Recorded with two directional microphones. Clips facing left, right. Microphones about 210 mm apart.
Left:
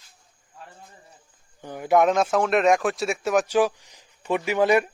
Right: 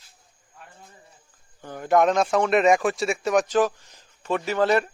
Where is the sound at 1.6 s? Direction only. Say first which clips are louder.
Even; 10° left (ahead or behind).